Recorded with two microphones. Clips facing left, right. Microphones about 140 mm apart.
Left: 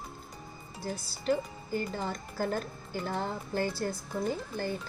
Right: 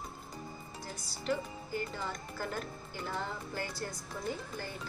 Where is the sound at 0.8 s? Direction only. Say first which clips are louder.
Left 7 dB; 30° left (ahead or behind).